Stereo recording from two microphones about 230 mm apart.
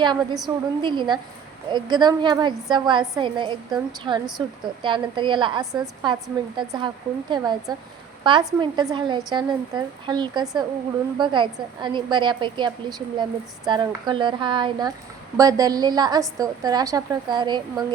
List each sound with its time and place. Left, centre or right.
0.4 s a woman's voice: centre